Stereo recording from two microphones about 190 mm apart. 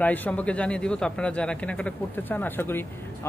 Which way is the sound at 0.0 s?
10° left (ahead or behind).